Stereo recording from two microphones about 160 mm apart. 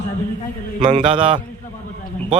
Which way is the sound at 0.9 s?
35° right (ahead or behind).